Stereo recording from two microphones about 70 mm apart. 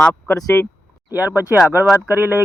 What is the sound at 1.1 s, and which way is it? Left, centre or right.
Speech, right.